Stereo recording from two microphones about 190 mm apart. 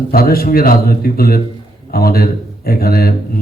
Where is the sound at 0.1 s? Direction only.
55° left (ahead or behind).